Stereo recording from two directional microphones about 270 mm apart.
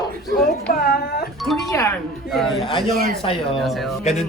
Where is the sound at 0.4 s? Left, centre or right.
Left.